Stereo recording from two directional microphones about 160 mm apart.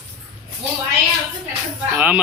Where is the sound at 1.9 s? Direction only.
10° right (ahead or behind).